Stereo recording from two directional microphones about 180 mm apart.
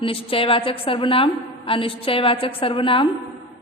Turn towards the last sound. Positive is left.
turn(degrees=30)  # may be behind; listen again after turning